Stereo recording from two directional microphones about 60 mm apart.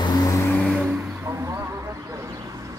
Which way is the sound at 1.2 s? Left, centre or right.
Right.